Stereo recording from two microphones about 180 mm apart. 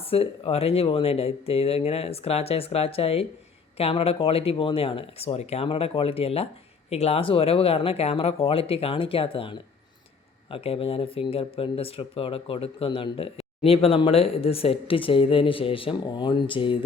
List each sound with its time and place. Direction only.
0.0 s speech: 30° left (ahead or behind)